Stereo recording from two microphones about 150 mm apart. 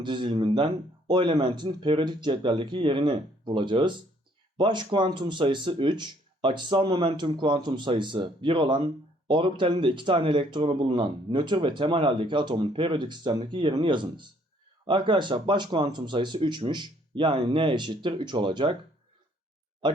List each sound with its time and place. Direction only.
0.0 s speech: 30° right (ahead or behind)